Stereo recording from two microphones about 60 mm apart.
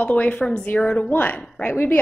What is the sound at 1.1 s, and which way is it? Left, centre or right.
Speech, left.